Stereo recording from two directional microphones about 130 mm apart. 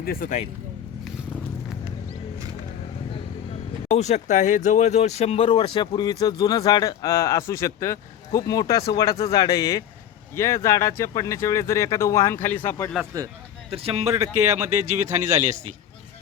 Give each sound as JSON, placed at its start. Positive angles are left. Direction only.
{"t": 0.2, "sound": "speech", "side_deg": 70}
{"t": 3.8, "sound": "speech", "side_deg": 55}
{"t": 13.1, "sound": "speech", "side_deg": -25}
{"t": 13.7, "sound": "speech", "side_deg": -50}
{"t": 14.2, "sound": "speech", "side_deg": -25}
{"t": 14.8, "sound": "a man's voice", "side_deg": -65}